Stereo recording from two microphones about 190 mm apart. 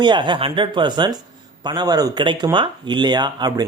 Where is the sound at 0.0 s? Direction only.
25° right (ahead or behind).